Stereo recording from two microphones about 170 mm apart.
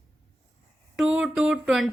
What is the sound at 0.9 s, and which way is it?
Speech, 5° right (ahead or behind).